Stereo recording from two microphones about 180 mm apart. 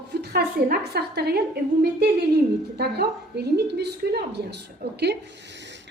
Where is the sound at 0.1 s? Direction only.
60° right (ahead or behind).